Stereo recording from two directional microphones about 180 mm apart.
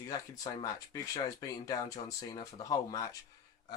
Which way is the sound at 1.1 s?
20° left (ahead or behind).